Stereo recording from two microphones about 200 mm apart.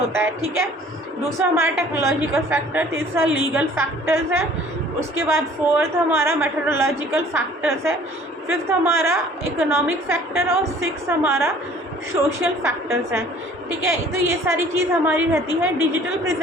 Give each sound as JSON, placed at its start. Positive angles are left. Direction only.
{"t": 1.4, "sound": "a woman's voice", "side_deg": -15}
{"t": 12.1, "sound": "a woman's voice", "side_deg": -25}
{"t": 12.6, "sound": "a woman's voice", "side_deg": -15}